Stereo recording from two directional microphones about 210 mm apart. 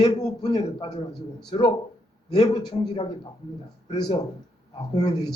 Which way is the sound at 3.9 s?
20° left (ahead or behind).